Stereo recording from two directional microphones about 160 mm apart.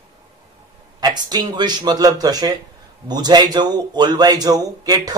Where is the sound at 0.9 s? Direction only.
25° right (ahead or behind).